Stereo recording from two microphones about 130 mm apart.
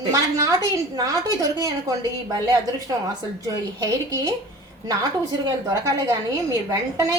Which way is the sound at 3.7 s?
30° right (ahead or behind).